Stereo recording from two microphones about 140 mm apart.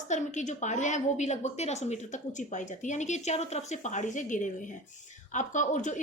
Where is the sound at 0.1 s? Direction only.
60° left (ahead or behind).